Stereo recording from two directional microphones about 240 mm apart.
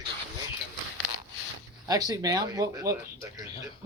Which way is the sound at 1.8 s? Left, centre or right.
Centre.